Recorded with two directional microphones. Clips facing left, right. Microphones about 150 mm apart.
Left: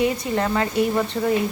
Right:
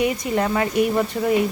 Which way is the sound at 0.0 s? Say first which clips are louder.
Right 1 dB; 15° right (ahead or behind).